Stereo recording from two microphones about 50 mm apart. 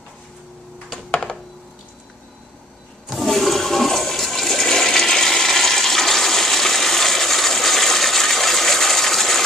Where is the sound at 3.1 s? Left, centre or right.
Centre.